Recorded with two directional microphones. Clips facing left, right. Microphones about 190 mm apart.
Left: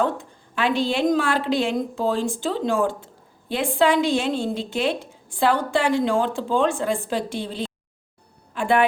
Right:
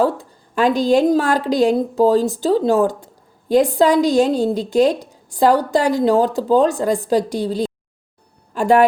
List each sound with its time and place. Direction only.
0.0 s a woman's voice: 40° right (ahead or behind)